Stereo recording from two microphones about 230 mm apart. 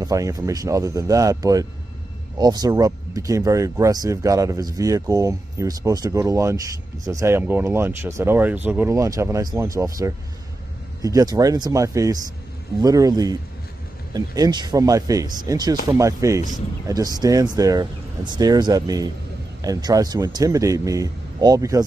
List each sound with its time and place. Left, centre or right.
0.0 s speech: centre